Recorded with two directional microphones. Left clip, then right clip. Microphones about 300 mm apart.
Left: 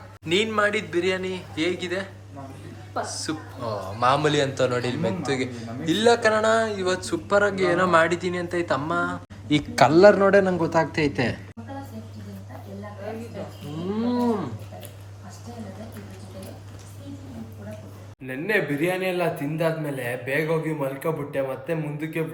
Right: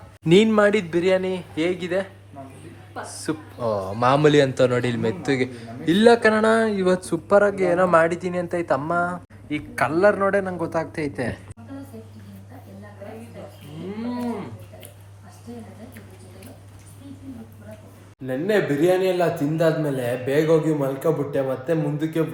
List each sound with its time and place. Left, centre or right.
0.3 s a man's voice: centre
9.5 s speech: centre
18.3 s a man's voice: centre